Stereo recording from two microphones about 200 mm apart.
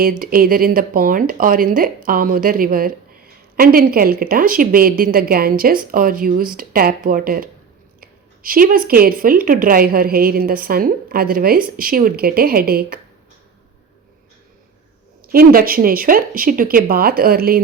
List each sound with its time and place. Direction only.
0.2 s speech: 45° right (ahead or behind)
15.3 s speech: 45° right (ahead or behind)